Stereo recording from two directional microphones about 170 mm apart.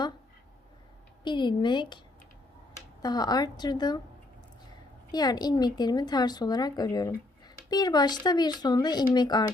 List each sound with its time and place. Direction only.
1.2 s speech: 25° left (ahead or behind)
3.0 s speech: 25° left (ahead or behind)
5.1 s speech: 25° left (ahead or behind)